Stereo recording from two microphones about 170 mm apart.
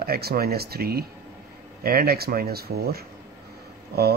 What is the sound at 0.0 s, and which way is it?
Speech, 65° right (ahead or behind).